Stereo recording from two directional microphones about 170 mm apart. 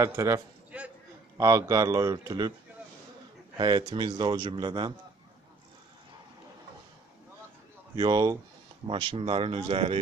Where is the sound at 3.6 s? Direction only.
25° right (ahead or behind).